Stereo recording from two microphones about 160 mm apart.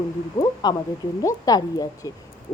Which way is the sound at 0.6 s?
25° left (ahead or behind).